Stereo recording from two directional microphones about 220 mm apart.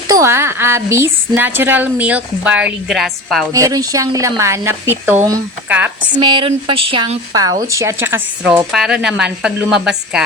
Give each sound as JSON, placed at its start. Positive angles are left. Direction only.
{"t": 0.1, "sound": "a woman's voice", "side_deg": -10}
{"t": 3.5, "sound": "a woman's voice", "side_deg": -15}
{"t": 6.1, "sound": "a woman's voice", "side_deg": -20}